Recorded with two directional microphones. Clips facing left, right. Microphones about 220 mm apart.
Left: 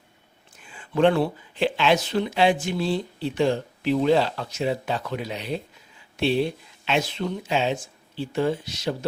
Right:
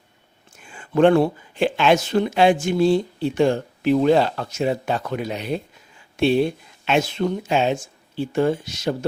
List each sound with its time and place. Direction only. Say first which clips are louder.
0.6 s speech: right 4 dB; 45° right (ahead or behind)